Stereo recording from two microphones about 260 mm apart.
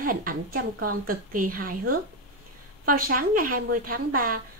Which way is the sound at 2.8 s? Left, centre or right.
Right.